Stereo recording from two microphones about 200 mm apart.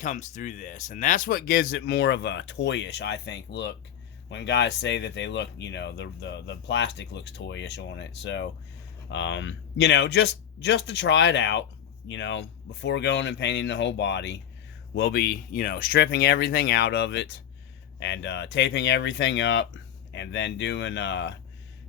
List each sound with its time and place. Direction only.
0.0 s speech: 40° left (ahead or behind); by 15.2 s 70° left (ahead or behind)
15.2 s speech: 45° left (ahead or behind)